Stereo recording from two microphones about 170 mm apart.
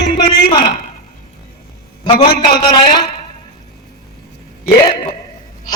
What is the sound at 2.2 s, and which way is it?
Speech, 65° left (ahead or behind).